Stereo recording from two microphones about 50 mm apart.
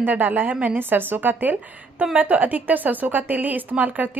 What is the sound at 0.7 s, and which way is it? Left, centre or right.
A woman's voice, right.